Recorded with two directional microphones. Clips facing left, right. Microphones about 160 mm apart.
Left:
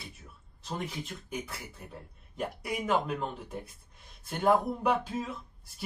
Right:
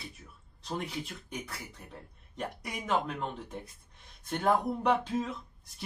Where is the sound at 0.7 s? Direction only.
Centre (ahead or behind).